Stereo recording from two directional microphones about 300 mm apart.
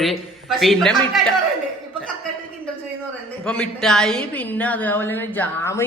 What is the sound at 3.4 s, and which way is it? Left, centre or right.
A woman's voice, centre.